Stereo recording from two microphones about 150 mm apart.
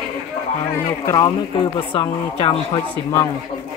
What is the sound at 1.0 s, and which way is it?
Speech, 30° left (ahead or behind).